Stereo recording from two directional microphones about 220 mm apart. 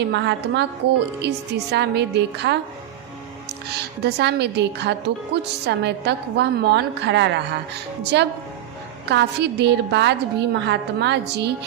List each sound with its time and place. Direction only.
0.0 s speech: 50° right (ahead or behind)
3.7 s speech: 50° right (ahead or behind)